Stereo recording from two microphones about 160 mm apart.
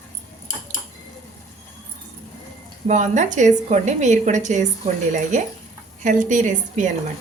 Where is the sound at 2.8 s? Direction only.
50° right (ahead or behind).